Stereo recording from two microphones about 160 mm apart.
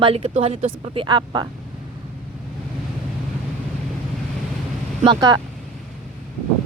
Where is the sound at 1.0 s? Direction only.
30° right (ahead or behind).